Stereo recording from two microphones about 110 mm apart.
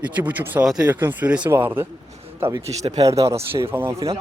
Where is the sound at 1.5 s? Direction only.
25° right (ahead or behind).